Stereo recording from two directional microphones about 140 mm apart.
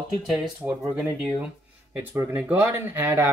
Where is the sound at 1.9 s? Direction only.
15° right (ahead or behind).